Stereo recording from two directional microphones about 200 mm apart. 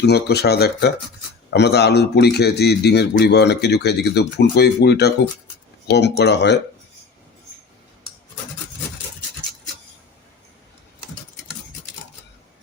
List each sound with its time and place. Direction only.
0.0 s speech: 55° left (ahead or behind)